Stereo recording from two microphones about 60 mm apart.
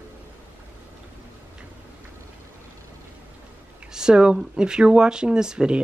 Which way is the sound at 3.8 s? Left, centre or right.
Centre.